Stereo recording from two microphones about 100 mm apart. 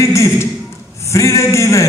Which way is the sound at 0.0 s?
30° left (ahead or behind).